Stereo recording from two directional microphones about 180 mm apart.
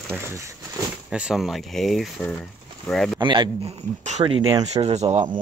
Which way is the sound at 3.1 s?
25° right (ahead or behind).